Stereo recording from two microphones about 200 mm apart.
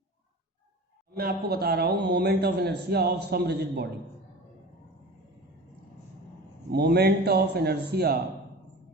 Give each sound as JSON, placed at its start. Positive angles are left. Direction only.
{"t": 1.1, "sound": "speech", "side_deg": -50}
{"t": 6.7, "sound": "speech", "side_deg": -55}